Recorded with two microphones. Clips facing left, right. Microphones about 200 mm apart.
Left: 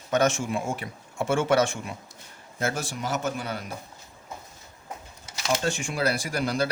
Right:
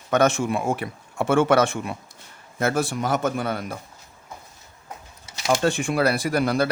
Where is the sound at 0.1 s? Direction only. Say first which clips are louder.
Right 4 dB; 60° right (ahead or behind).